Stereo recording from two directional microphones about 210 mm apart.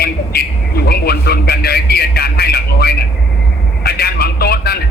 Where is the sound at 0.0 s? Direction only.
50° left (ahead or behind).